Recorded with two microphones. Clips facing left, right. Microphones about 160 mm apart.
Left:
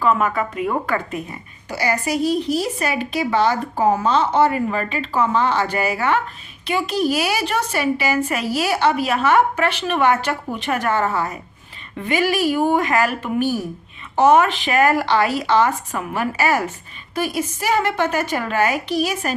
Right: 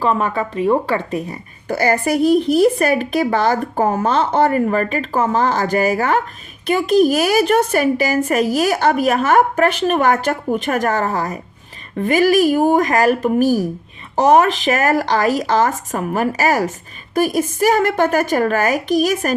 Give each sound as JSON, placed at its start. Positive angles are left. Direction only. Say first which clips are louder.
{"t": 0.0, "sound": "speech", "louder": "right 1 dB", "side_deg": -30}
{"t": 1.6, "sound": "a woman's voice", "louder": "right 5 dB", "side_deg": -50}